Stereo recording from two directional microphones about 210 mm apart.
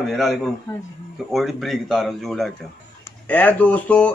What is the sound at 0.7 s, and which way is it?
Speech, 15° left (ahead or behind).